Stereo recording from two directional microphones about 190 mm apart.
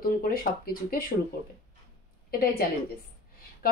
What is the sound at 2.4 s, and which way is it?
Speech, 50° left (ahead or behind).